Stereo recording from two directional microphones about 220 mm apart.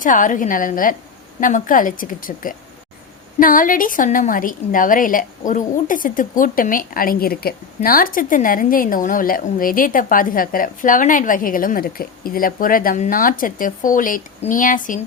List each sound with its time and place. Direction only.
0.0 s a woman's voice: 35° left (ahead or behind)